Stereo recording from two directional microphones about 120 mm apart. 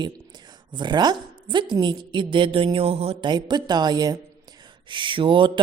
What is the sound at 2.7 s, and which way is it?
Mantra, 55° right (ahead or behind).